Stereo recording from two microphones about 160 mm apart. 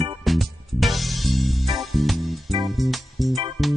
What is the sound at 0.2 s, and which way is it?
Music, centre (ahead or behind).